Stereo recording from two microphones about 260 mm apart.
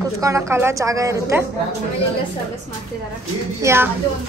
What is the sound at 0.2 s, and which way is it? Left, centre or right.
A woman's voice, centre.